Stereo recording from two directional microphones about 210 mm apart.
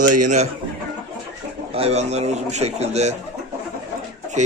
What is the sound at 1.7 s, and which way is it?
A man's voice, 30° right (ahead or behind).